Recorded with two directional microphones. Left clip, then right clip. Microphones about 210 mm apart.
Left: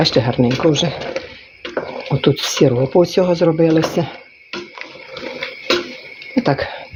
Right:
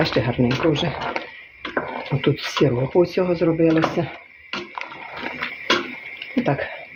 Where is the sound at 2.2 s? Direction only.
35° left (ahead or behind).